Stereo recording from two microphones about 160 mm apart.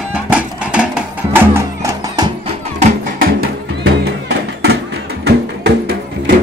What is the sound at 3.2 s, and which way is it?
Music, 70° right (ahead or behind).